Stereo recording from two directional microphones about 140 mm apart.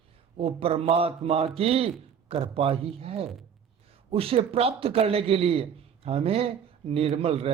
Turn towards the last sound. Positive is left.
turn(degrees=-45)  # may be behind; listen again after turning